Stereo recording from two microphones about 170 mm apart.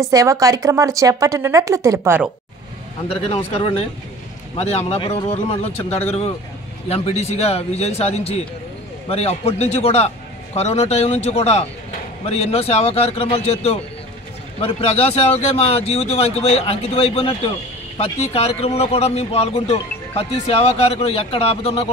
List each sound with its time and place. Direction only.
0.0 s speech: 20° right (ahead or behind)
3.1 s a man's voice: 35° left (ahead or behind)